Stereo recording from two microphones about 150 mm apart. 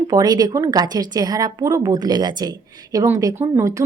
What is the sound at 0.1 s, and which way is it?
Speech, 25° right (ahead or behind).